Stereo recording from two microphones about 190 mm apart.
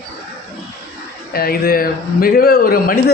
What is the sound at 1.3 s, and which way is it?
A man's voice, 50° left (ahead or behind).